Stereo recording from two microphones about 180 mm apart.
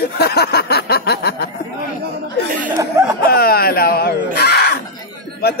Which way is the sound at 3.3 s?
60° left (ahead or behind).